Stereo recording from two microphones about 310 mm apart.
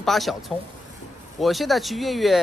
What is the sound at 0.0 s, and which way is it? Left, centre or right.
Speech, centre.